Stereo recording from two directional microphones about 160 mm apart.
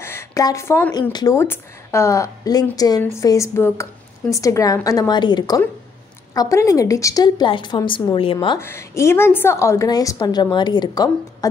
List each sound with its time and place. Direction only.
0.0 s a sound: 15° left (ahead or behind)
1.1 s a woman's voice: 20° left (ahead or behind)
8.5 s a woman's voice: 15° left (ahead or behind)